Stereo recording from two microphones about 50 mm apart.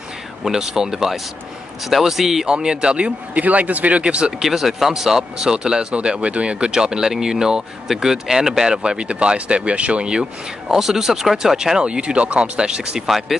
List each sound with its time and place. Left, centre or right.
0.4 s speech: centre
3.3 s speech: right
4.4 s speech: centre
10.7 s speech: centre
13.0 s speech: centre